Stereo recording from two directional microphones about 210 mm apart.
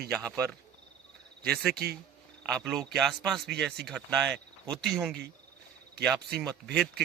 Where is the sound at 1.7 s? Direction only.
50° right (ahead or behind).